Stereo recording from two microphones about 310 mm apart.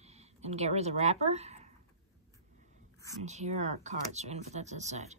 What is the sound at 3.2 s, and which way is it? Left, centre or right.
Speech, right.